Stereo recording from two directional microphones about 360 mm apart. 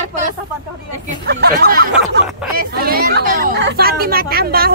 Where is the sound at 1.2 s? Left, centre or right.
Right.